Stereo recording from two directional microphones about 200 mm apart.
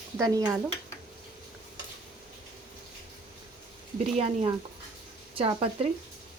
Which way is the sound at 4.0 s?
30° right (ahead or behind).